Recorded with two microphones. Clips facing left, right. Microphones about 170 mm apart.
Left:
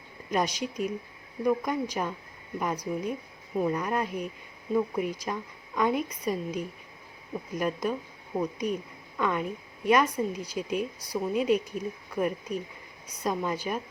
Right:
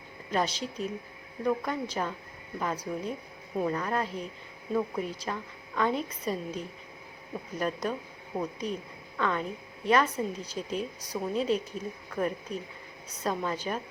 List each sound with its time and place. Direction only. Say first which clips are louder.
0.3 s a woman's voice: left 1 dB; 15° left (ahead or behind)